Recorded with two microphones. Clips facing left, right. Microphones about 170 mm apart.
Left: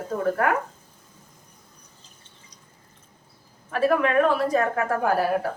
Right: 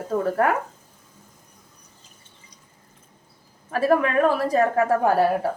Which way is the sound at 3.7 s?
35° right (ahead or behind).